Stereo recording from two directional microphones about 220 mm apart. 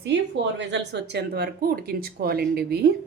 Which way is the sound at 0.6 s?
55° right (ahead or behind).